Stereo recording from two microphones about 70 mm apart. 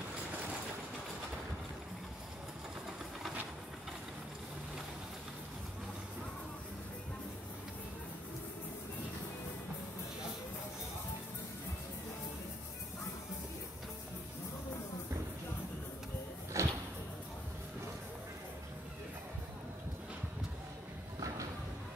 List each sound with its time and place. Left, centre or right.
16.5 s slam: right